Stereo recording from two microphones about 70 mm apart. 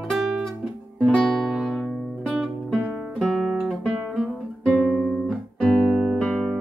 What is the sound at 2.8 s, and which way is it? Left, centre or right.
Guitar, centre.